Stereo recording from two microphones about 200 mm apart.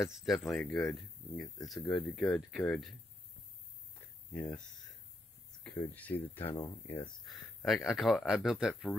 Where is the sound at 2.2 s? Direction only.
5° left (ahead or behind).